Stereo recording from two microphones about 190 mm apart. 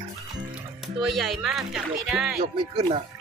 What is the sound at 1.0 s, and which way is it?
Speech, centre (ahead or behind).